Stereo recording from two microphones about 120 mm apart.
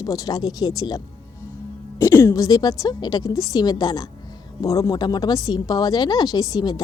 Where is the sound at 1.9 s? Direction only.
20° left (ahead or behind).